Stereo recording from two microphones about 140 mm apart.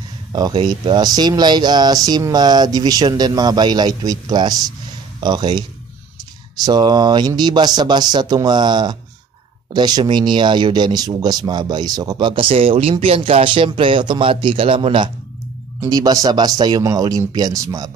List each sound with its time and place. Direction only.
0.3 s speech: 30° right (ahead or behind)
15.8 s speech: 25° right (ahead or behind)